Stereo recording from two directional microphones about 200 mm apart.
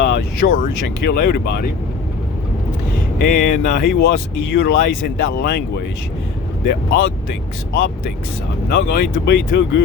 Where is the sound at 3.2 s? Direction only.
50° left (ahead or behind).